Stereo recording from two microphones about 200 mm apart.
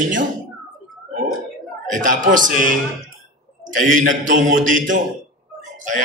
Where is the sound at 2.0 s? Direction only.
40° right (ahead or behind).